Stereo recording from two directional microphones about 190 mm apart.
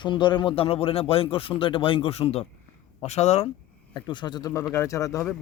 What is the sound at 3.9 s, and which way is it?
Speech, 25° left (ahead or behind).